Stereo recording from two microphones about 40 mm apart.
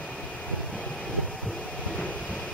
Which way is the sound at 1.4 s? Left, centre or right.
Left.